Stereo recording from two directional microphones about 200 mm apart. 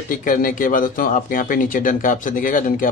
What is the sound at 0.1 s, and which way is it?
Speech, 45° left (ahead or behind).